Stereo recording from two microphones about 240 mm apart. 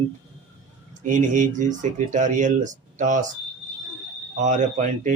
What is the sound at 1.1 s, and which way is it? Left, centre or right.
Speech, right.